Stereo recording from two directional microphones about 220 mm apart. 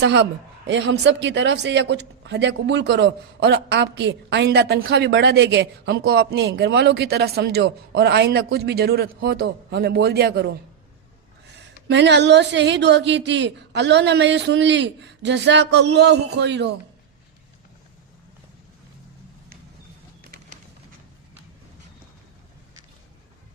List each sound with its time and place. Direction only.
0.7 s a man's voice: 55° right (ahead or behind)
11.9 s a man's voice: 50° right (ahead or behind)